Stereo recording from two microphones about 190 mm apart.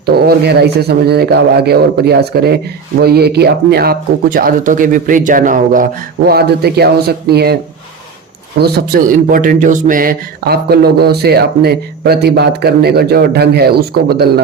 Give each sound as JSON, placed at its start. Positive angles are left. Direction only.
{"t": 0.0, "sound": "speech", "side_deg": -55}
{"t": 6.2, "sound": "speech", "side_deg": -55}
{"t": 8.5, "sound": "speech", "side_deg": -55}